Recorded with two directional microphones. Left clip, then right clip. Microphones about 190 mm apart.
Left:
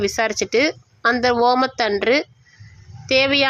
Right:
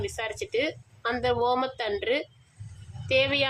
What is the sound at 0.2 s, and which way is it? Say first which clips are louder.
Speech: left 10 dB; 25° left (ahead or behind).